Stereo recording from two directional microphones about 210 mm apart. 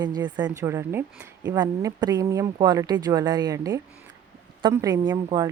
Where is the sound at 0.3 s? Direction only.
20° right (ahead or behind).